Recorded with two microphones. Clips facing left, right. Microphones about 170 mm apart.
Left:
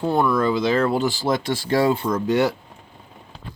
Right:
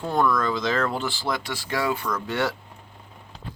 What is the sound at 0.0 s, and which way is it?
Speech, 10° left (ahead or behind).